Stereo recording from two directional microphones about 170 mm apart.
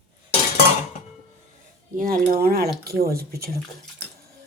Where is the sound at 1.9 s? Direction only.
55° right (ahead or behind).